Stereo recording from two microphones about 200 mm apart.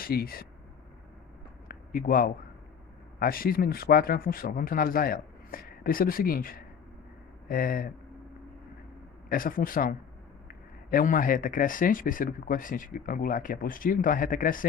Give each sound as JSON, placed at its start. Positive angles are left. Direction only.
{"t": 0.0, "sound": "speech", "side_deg": 50}
{"t": 1.6, "sound": "a sound", "side_deg": 45}
{"t": 3.2, "sound": "speech", "side_deg": 45}
{"t": 9.3, "sound": "speech", "side_deg": 45}